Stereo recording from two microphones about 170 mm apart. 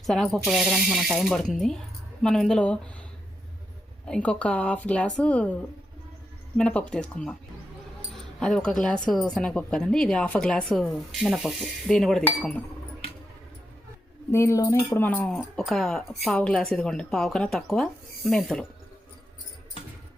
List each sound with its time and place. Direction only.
0.0 s a woman's voice: centre (ahead or behind)
4.0 s a woman's voice: 5° left (ahead or behind)
6.6 s a woman's voice: 5° left (ahead or behind)
14.3 s a woman's voice: 15° left (ahead or behind)